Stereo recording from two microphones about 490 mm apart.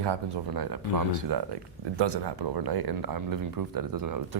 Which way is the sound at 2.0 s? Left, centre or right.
Right.